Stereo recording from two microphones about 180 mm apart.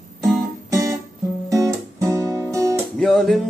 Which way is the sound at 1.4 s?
20° right (ahead or behind).